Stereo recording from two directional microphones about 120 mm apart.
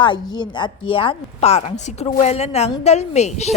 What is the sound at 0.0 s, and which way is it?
A woman's voice, 40° left (ahead or behind).